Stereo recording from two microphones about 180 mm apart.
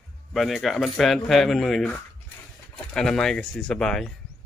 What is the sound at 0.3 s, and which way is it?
Speech, centre (ahead or behind).